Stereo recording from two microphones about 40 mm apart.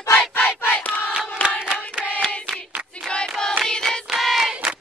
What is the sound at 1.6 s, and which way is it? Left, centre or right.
Hands, right.